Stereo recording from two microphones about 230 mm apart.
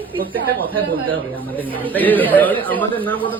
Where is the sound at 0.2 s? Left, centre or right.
Right.